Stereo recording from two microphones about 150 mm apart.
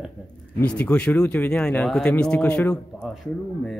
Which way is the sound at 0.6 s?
10° left (ahead or behind).